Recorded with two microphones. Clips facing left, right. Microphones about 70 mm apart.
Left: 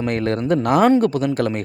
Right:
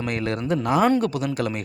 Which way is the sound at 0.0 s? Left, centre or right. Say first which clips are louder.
Left 5 dB; left.